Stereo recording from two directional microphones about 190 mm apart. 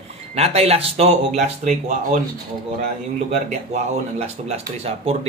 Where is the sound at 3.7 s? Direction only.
35° right (ahead or behind).